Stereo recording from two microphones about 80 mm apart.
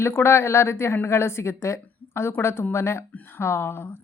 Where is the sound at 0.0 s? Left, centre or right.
Left.